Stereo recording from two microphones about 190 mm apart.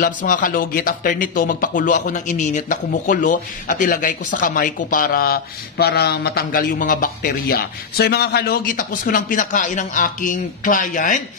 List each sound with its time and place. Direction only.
0.0 s speech: 45° left (ahead or behind)